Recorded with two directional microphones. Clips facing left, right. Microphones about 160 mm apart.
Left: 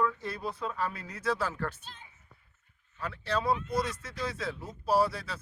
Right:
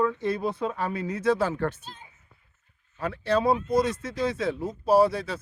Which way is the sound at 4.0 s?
20° right (ahead or behind).